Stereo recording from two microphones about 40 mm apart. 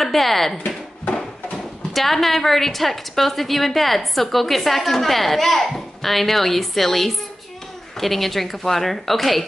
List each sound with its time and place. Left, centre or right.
0.0 s speech: centre
1.0 s a sound: left
2.0 s a woman's voice: centre